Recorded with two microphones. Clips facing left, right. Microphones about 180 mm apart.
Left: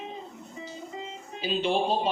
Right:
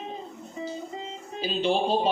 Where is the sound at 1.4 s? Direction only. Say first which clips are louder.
Right 2 dB; 35° right (ahead or behind).